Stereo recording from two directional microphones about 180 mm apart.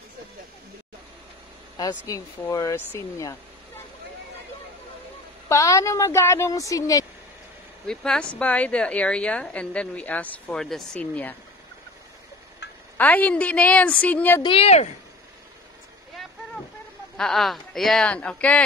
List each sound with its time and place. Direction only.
1.8 s speech: 20° left (ahead or behind)
5.5 s a woman's voice: 15° left (ahead or behind)
7.8 s a woman's voice: 5° left (ahead or behind)
12.9 s a woman's voice: 10° left (ahead or behind)
14.4 s speech: 30° left (ahead or behind)
17.2 s speech: centre (ahead or behind)